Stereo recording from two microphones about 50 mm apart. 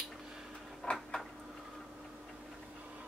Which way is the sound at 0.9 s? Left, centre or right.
Left.